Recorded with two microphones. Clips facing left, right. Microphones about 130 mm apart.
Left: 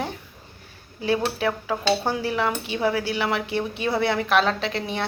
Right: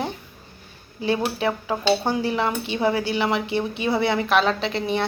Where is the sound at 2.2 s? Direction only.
5° left (ahead or behind).